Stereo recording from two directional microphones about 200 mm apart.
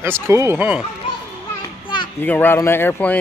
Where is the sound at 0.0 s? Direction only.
10° right (ahead or behind).